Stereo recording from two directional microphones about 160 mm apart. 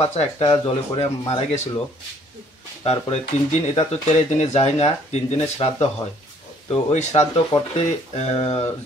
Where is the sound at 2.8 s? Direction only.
40° left (ahead or behind).